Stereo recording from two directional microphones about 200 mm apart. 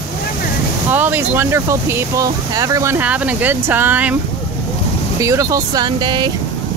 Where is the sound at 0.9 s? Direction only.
10° right (ahead or behind).